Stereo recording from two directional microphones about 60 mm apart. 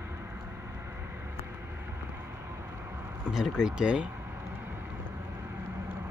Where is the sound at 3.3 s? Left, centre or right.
Centre.